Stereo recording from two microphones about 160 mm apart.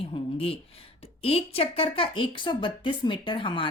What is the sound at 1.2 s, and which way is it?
A woman's voice, 35° left (ahead or behind).